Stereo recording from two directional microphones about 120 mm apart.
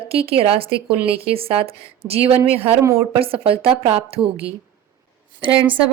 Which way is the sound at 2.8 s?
25° right (ahead or behind).